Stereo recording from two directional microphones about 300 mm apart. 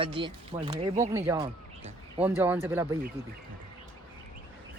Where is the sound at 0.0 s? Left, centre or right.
Centre.